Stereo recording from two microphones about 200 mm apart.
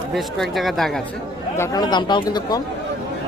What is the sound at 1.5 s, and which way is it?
Speech, 15° left (ahead or behind).